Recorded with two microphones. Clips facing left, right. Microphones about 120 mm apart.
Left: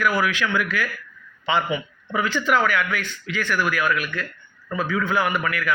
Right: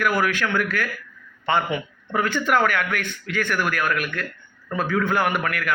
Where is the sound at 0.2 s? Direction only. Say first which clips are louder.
Even; 50° right (ahead or behind).